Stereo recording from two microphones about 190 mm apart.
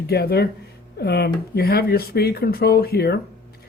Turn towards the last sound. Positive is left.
turn(degrees=55)  # may be behind; listen again after turning